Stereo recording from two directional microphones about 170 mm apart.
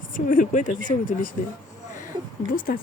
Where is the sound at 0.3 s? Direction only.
50° left (ahead or behind).